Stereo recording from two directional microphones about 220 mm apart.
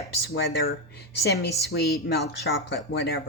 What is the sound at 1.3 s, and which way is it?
Speech, 45° left (ahead or behind).